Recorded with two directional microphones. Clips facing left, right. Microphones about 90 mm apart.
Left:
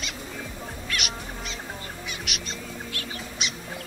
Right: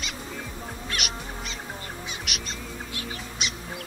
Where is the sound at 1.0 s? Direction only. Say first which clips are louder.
Even; centre (ahead or behind).